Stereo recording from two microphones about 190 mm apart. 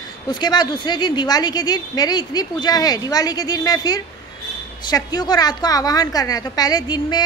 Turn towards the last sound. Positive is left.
turn(degrees=20)  # may be behind; listen again after turning